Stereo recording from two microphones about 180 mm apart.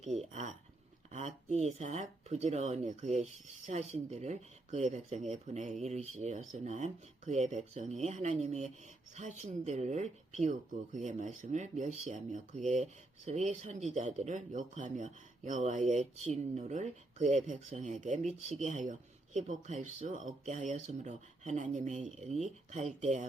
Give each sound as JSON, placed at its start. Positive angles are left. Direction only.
{"t": 0.2, "sound": "speech", "side_deg": -40}